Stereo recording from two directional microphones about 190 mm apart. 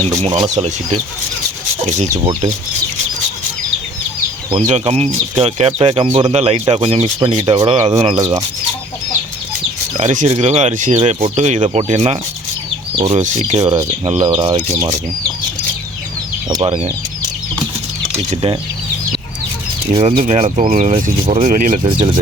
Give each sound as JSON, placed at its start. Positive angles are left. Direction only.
{"t": 0.2, "sound": "speech", "side_deg": -35}
{"t": 2.1, "sound": "speech", "side_deg": -35}
{"t": 4.5, "sound": "speech", "side_deg": -35}
{"t": 8.2, "sound": "speech", "side_deg": -20}
{"t": 10.0, "sound": "speech", "side_deg": -40}
{"t": 14.3, "sound": "speech", "side_deg": -25}
{"t": 16.5, "sound": "speech", "side_deg": -25}
{"t": 18.2, "sound": "speech", "side_deg": -35}
{"t": 19.9, "sound": "speech", "side_deg": -30}
{"t": 20.9, "sound": "speech", "side_deg": -30}
{"t": 21.4, "sound": "speech", "side_deg": -45}